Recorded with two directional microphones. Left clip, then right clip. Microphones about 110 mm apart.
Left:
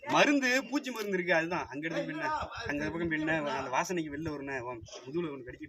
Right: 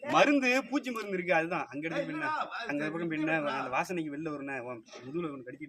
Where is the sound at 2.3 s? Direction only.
20° left (ahead or behind).